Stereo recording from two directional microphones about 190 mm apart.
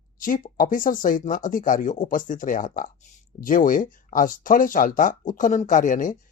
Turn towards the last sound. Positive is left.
turn(degrees=45)  # may be behind; listen again after turning